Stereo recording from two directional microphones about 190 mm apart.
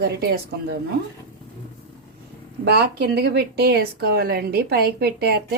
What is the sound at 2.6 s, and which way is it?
Speech, 60° right (ahead or behind).